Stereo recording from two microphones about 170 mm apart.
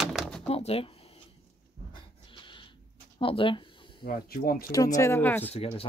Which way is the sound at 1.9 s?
30° left (ahead or behind).